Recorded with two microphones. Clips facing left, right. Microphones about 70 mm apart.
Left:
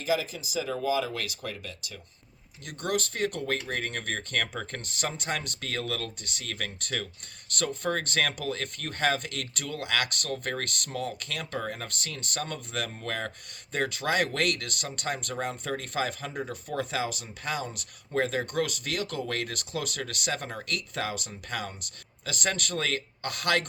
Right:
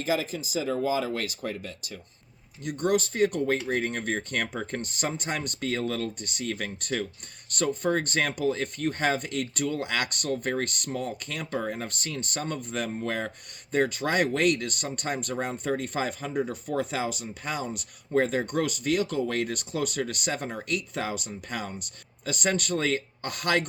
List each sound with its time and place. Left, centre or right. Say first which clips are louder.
0.0 s speech: right 1 dB; right
2.9 s speech: right 4 dB; centre
11.7 s speech: right 4 dB; right; by 20.7 s centre
20.9 s speech: right 2 dB; right